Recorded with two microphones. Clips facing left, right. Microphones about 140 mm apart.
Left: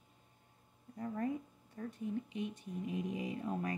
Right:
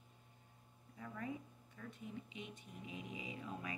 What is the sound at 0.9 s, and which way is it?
Speech, 40° left (ahead or behind).